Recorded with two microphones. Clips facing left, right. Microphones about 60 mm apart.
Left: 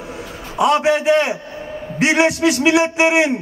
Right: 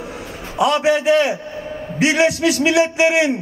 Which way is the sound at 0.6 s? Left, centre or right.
Left.